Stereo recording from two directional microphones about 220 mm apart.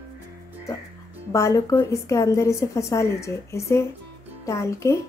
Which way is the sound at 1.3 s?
15° left (ahead or behind).